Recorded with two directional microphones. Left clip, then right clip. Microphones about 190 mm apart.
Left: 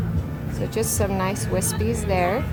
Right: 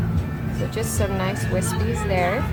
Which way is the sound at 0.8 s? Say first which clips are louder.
Left 2 dB; 35° left (ahead or behind).